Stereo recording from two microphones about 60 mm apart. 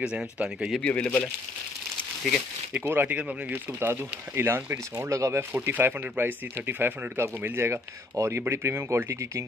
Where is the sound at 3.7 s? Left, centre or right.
Right.